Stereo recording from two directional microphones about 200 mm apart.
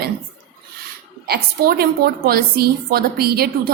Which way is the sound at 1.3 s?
50° right (ahead or behind).